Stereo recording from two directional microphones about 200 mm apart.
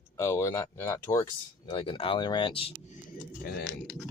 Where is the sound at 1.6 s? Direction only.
25° left (ahead or behind).